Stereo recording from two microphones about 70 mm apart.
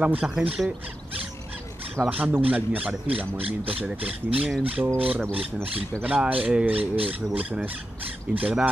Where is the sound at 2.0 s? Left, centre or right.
Right.